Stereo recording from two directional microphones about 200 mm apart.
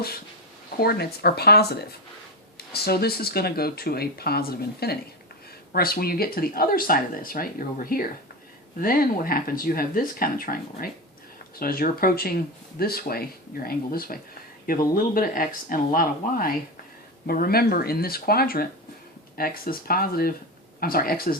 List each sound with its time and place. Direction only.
0.8 s speech: 50° left (ahead or behind)